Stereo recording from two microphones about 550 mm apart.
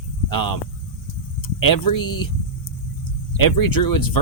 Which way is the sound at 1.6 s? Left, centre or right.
Left.